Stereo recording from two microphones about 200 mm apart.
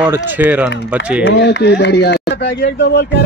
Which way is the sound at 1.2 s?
60° left (ahead or behind).